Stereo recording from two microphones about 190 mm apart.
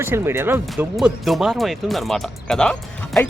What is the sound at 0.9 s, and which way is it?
Speech, centre (ahead or behind).